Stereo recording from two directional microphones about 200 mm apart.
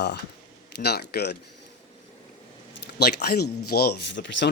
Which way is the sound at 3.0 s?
55° left (ahead or behind).